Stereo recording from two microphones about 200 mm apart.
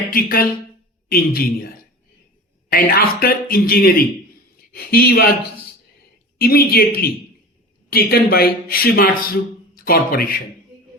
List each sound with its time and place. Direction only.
0.1 s a man's voice: 45° left (ahead or behind)
2.7 s a man's voice: 45° left (ahead or behind)
6.4 s a man's voice: 50° left (ahead or behind)